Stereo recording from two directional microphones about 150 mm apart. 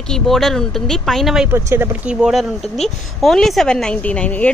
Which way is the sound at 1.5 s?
15° right (ahead or behind).